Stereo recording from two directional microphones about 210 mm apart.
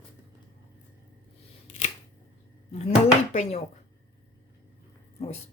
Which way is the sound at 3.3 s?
30° left (ahead or behind).